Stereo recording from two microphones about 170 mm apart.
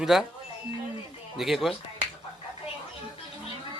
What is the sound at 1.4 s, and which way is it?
Speech, centre (ahead or behind).